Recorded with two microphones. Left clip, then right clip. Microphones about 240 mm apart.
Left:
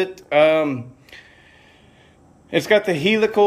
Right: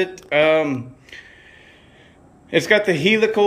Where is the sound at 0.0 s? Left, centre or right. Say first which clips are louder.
Left 1 dB; centre.